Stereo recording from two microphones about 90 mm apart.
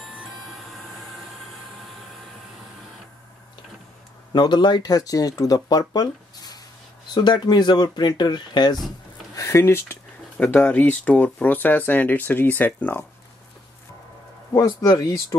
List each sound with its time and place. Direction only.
4.3 s speech: 55° left (ahead or behind)
9.3 s speech: 35° left (ahead or behind)
14.5 s speech: 35° left (ahead or behind)